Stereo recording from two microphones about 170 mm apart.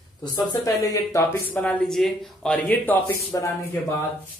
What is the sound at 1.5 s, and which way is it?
Speech, 5° left (ahead or behind).